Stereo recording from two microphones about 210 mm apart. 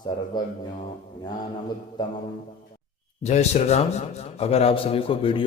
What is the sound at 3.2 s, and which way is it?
A man's voice, 30° left (ahead or behind).